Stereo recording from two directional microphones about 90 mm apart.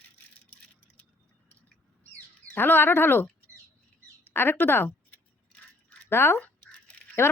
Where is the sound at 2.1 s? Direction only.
20° left (ahead or behind).